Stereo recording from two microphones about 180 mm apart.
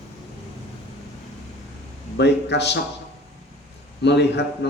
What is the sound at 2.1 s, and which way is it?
Speech, 70° left (ahead or behind).